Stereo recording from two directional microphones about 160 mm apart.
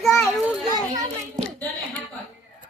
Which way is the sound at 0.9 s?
25° right (ahead or behind).